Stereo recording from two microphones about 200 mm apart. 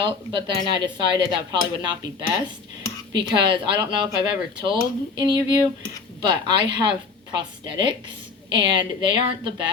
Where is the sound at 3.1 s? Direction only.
25° right (ahead or behind).